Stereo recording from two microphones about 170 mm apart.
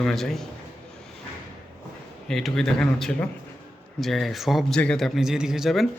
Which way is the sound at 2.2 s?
5° left (ahead or behind).